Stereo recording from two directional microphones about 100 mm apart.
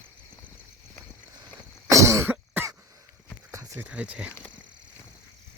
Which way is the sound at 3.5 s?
25° right (ahead or behind).